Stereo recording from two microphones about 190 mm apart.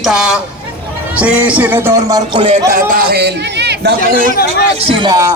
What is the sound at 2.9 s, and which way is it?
A man's voice, 55° right (ahead or behind).